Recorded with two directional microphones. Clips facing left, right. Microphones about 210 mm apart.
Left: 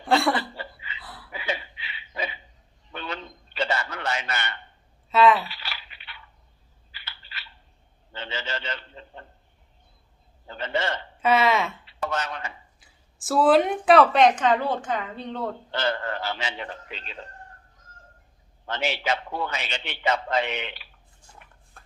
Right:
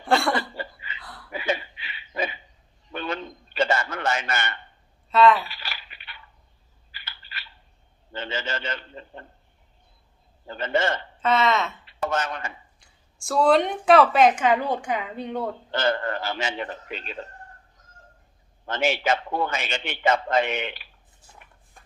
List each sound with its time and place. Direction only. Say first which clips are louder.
0.0 s chuckle: even; centre (ahead or behind)
0.5 s a sound: right 3 dB; 45° right (ahead or behind)
0.9 s a sound: even; 5° left (ahead or behind)
1.3 s laughter: right 4 dB; 50° right (ahead or behind)
2.9 s a sound: right 5 dB; 50° right (ahead or behind)
5.0 s speech: right 1 dB; centre (ahead or behind)
5.5 s a sound: even; 50° right (ahead or behind)
8.1 s a man's voice: right 3 dB; 50° right (ahead or behind)
10.5 s a man's voice: right 3 dB; 50° right (ahead or behind)
11.2 s speech: left 1 dB; 10° left (ahead or behind)
11.9 s speech: right 3 dB; 50° right (ahead or behind)
12.8 s speech: left 1 dB; 5° left (ahead or behind)
15.7 s a man's voice: right 4 dB; 50° right (ahead or behind)
18.7 s a man's voice: right 4 dB; 50° right (ahead or behind)